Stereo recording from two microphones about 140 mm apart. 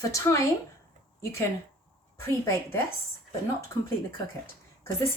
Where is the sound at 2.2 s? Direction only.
15° left (ahead or behind).